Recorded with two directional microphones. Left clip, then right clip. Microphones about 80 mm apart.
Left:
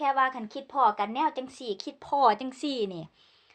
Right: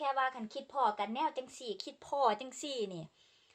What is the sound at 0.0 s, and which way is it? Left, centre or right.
A woman's voice, right.